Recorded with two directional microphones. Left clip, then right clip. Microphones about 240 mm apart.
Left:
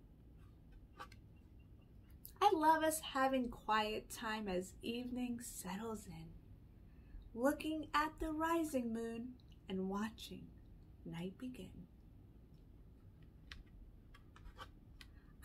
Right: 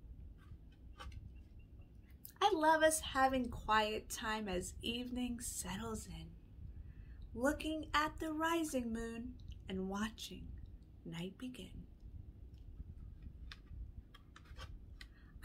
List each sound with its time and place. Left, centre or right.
2.3 s a woman's voice: centre
7.3 s speech: centre